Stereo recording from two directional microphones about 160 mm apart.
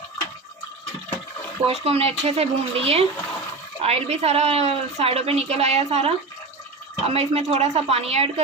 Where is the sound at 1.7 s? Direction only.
40° right (ahead or behind).